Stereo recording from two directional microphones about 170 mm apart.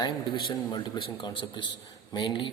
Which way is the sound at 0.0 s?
25° left (ahead or behind).